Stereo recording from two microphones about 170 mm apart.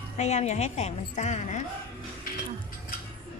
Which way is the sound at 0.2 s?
40° left (ahead or behind).